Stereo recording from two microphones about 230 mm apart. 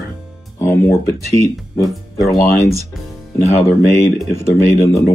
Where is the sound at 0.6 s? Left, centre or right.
Centre.